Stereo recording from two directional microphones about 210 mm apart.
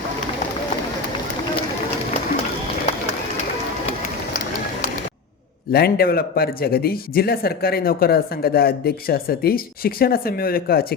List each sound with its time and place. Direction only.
5.7 s a man's voice: 45° left (ahead or behind)